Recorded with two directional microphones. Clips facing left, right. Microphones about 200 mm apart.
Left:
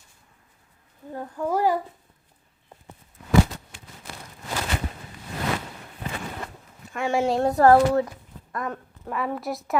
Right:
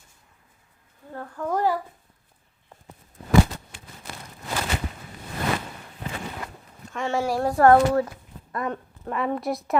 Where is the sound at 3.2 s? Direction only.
30° right (ahead or behind).